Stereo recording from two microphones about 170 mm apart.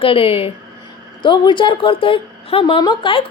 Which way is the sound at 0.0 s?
30° left (ahead or behind).